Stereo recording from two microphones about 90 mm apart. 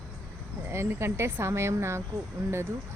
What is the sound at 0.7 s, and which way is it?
Speech, 30° right (ahead or behind).